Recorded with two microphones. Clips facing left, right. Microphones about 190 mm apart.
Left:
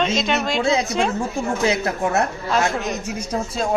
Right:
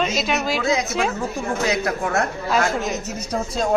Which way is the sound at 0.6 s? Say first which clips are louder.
Left 2 dB; 30° left (ahead or behind).